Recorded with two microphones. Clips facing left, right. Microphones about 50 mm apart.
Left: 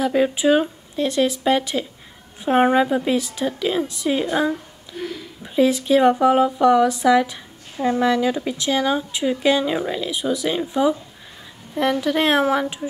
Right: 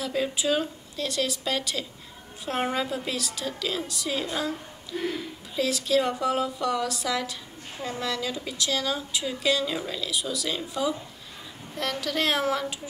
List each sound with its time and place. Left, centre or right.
0.0 s speech: left
5.6 s speech: left